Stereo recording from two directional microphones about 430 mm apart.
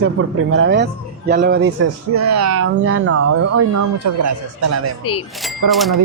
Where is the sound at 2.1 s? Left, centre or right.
Right.